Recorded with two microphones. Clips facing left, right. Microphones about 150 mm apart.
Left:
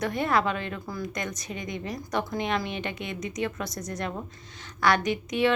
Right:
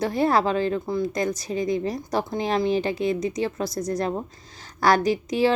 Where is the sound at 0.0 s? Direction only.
30° right (ahead or behind).